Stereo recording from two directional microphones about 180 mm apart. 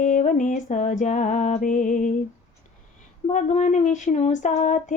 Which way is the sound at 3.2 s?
40° left (ahead or behind).